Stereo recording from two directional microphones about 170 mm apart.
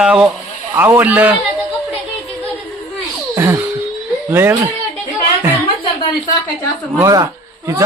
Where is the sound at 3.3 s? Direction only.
15° right (ahead or behind).